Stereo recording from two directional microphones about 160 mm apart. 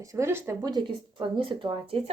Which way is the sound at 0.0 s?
20° right (ahead or behind).